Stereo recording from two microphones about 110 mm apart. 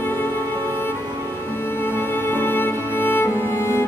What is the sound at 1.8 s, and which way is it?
Music, 20° left (ahead or behind).